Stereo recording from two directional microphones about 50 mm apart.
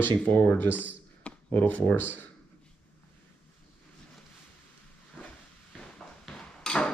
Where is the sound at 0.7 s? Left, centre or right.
Right.